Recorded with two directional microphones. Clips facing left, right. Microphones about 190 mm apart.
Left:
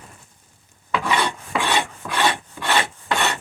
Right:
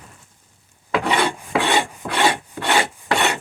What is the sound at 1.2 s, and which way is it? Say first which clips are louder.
Filing: right 4 dB; 20° right (ahead or behind).